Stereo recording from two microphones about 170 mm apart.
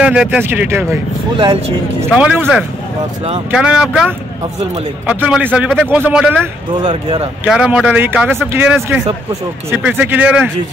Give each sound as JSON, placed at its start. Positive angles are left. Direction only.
{"t": 0.0, "sound": "speech", "side_deg": -5}
{"t": 2.1, "sound": "speech", "side_deg": -5}
{"t": 3.5, "sound": "speech", "side_deg": -5}
{"t": 6.7, "sound": "speech", "side_deg": -25}
{"t": 7.4, "sound": "speech", "side_deg": -5}